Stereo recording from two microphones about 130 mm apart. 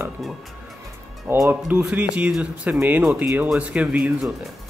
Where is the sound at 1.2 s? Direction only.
15° right (ahead or behind).